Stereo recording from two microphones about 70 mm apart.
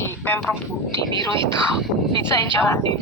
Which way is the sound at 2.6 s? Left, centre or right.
Left.